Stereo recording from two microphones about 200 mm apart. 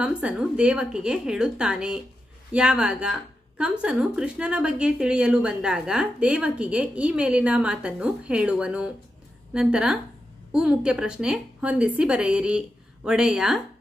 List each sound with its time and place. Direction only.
0.0 s speech: 5° right (ahead or behind)